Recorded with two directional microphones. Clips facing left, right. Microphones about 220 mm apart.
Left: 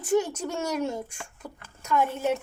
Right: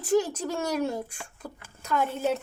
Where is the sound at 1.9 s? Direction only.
35° right (ahead or behind).